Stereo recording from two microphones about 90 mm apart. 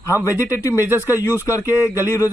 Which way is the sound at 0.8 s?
25° right (ahead or behind).